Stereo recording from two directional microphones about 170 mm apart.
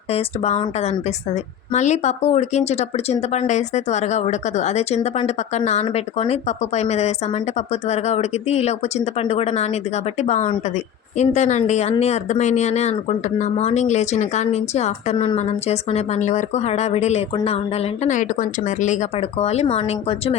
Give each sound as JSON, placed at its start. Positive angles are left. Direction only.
{"t": 0.1, "sound": "speech", "side_deg": 35}